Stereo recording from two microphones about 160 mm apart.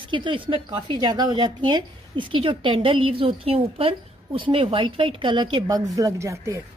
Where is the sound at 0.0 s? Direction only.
30° right (ahead or behind).